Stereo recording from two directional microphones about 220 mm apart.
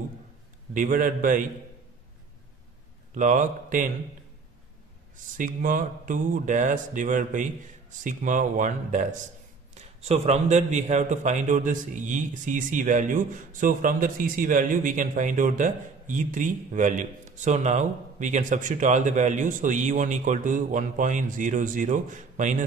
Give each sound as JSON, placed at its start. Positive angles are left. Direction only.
{"t": 0.7, "sound": "a man's voice", "side_deg": -35}
{"t": 3.2, "sound": "a man's voice", "side_deg": -35}
{"t": 5.1, "sound": "a man's voice", "side_deg": -35}